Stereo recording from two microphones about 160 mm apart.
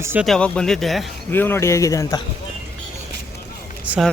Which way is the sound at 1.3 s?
15° left (ahead or behind).